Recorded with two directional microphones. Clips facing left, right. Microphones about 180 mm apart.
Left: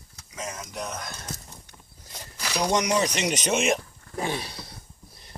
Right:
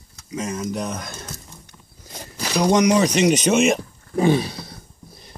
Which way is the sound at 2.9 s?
5° right (ahead or behind).